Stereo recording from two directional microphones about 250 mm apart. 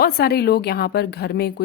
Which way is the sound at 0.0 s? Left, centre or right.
Left.